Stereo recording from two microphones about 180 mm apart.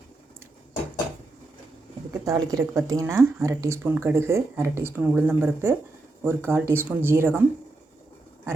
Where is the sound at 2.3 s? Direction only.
20° right (ahead or behind).